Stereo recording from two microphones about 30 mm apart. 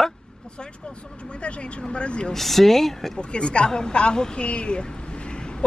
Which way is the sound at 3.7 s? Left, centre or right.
Left.